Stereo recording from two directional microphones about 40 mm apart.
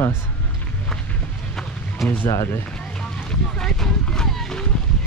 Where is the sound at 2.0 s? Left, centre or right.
Centre.